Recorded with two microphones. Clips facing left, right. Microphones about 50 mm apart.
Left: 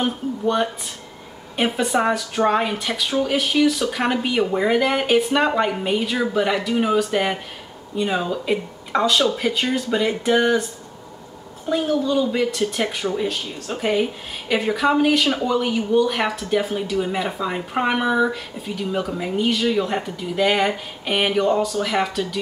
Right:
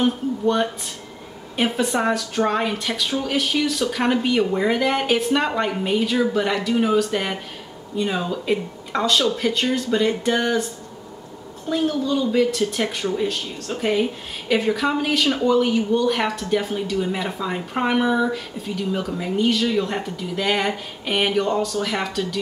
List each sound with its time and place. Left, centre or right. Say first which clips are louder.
0.0 s speech: right 2 dB; centre
11.7 s speech: left 2 dB; centre